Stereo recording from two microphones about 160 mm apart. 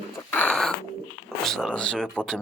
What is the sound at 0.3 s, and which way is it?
Bird, 5° left (ahead or behind).